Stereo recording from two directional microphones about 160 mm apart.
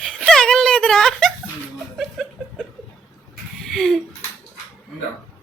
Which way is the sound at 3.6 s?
Centre (ahead or behind).